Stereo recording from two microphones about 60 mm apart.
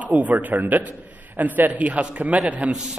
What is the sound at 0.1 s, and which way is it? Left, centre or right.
A man's voice, right.